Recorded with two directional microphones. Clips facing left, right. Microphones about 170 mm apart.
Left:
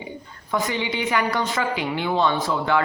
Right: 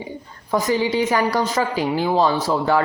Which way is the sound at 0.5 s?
40° right (ahead or behind).